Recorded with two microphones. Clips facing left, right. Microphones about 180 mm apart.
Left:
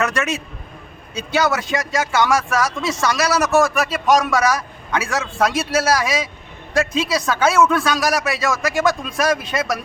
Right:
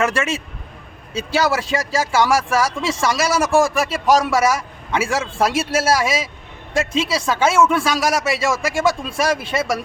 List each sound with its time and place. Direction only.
0.0 s speech: 30° right (ahead or behind)